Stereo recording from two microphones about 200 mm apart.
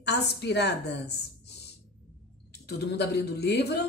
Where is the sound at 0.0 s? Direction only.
55° left (ahead or behind).